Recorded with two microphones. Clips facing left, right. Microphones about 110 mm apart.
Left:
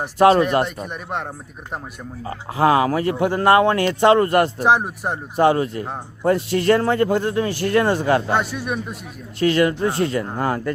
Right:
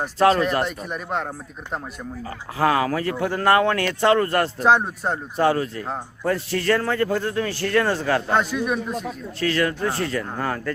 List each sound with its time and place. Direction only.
0.2 s speech: 15° left (ahead or behind)
0.8 s a man's voice: centre (ahead or behind)
2.2 s speech: 20° left (ahead or behind)
5.4 s a man's voice: 20° left (ahead or behind)
8.3 s a man's voice: 5° left (ahead or behind)
9.4 s a man's voice: 20° left (ahead or behind)